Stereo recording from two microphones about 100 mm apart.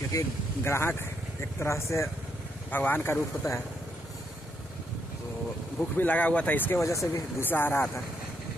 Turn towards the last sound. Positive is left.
turn(degrees=20)  # may be behind; listen again after turning